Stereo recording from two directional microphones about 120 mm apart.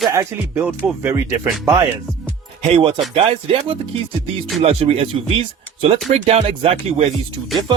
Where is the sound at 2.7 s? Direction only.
50° right (ahead or behind).